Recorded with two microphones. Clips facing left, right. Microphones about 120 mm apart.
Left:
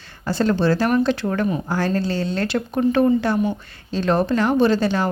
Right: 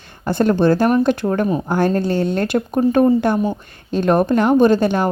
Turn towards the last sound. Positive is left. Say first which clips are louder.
# right 4 dB
turn(degrees=-50)  # may be behind; listen again after turning